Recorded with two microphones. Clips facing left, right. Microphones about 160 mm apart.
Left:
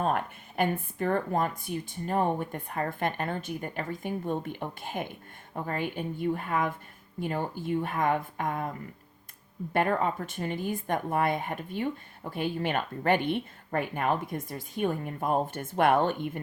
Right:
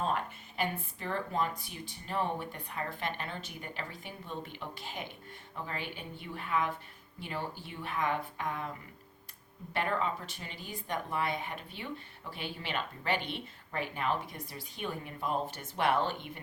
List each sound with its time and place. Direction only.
0.0 s speech: 55° left (ahead or behind)
9.7 s speech: 50° left (ahead or behind)